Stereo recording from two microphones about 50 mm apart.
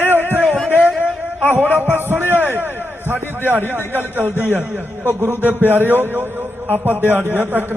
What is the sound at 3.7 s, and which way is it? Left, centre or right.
A man's voice, right.